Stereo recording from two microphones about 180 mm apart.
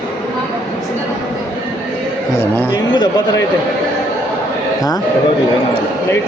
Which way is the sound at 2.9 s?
25° left (ahead or behind).